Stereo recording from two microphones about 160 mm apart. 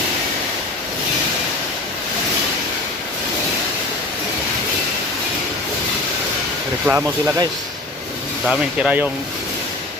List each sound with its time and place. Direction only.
6.8 s speech: 10° right (ahead or behind)
8.4 s speech: 5° right (ahead or behind)